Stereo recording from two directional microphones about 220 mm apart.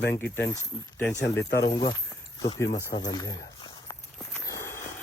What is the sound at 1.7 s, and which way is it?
Speech, 20° left (ahead or behind).